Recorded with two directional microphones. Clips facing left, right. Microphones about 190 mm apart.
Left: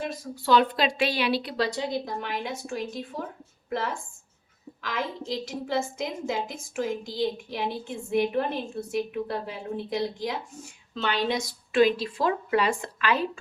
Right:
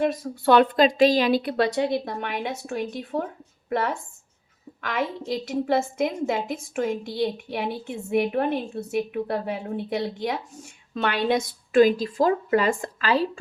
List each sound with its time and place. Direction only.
0.0 s a woman's voice: 55° right (ahead or behind)
5.2 s a woman's voice: 60° right (ahead or behind); by 13.4 s 35° right (ahead or behind)